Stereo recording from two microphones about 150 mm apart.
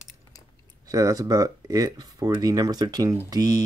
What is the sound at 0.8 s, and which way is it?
Speech, 25° right (ahead or behind).